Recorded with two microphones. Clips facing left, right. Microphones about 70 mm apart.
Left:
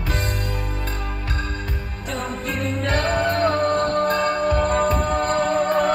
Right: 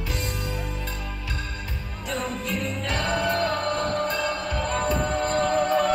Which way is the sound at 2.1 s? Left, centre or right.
Left.